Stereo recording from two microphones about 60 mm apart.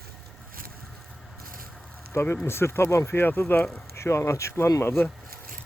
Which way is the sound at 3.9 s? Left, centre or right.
Left.